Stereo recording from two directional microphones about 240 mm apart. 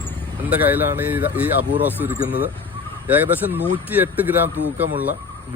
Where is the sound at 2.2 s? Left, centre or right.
Left.